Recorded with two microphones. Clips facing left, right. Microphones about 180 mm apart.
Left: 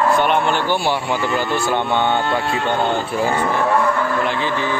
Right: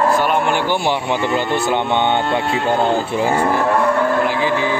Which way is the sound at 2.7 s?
30° right (ahead or behind).